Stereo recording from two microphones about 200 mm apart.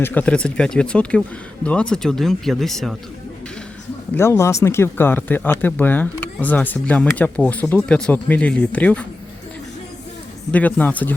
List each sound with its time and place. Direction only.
0.0 s speech: 10° left (ahead or behind)
4.1 s speech: 10° left (ahead or behind)
10.5 s speech: 10° left (ahead or behind)